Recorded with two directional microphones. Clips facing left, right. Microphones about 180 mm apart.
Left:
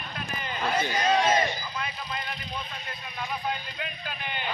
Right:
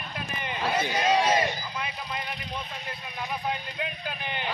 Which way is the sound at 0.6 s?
5° right (ahead or behind).